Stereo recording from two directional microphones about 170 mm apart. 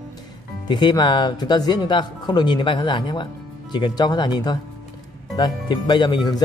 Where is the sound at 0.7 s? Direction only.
25° left (ahead or behind).